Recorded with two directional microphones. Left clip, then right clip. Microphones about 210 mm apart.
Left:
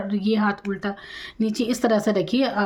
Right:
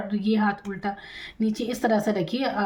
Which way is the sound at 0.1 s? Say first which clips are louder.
Left 2 dB; 30° left (ahead or behind).